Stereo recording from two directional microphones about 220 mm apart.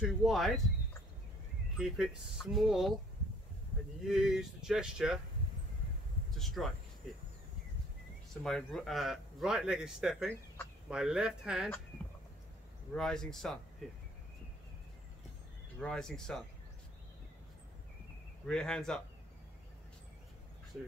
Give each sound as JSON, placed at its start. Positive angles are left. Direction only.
{"t": 0.0, "sound": "speech", "side_deg": 0}
{"t": 1.8, "sound": "speech", "side_deg": 0}
{"t": 4.1, "sound": "speech", "side_deg": 0}
{"t": 6.3, "sound": "speech", "side_deg": 0}
{"t": 8.4, "sound": "speech", "side_deg": 5}
{"t": 12.9, "sound": "speech", "side_deg": 0}
{"t": 15.8, "sound": "speech", "side_deg": 5}
{"t": 18.5, "sound": "speech", "side_deg": 5}